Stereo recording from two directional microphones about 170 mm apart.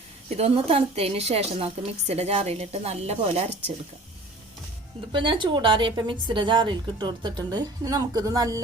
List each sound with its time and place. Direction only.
0.3 s a woman's voice: 35° right (ahead or behind)
5.1 s a woman's voice: 30° right (ahead or behind)